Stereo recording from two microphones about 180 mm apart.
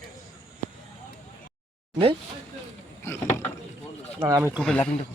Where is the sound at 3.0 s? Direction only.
15° left (ahead or behind).